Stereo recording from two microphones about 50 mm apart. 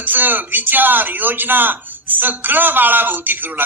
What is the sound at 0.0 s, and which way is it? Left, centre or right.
A woman's voice, right.